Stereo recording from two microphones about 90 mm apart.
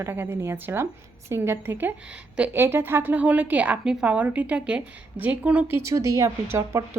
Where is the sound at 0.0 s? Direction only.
25° right (ahead or behind).